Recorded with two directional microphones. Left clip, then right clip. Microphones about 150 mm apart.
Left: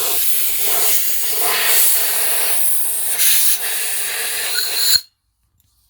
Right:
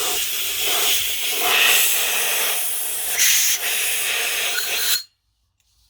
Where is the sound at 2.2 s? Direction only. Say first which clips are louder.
Right 1 dB; 10° right (ahead or behind).